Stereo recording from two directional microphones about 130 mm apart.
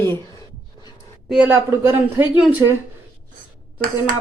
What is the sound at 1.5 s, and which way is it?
A woman's voice, 15° right (ahead or behind).